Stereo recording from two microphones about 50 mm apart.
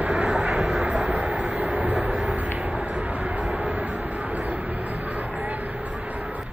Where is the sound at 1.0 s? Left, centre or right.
Right.